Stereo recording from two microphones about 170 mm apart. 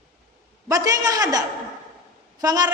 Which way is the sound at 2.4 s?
20° right (ahead or behind).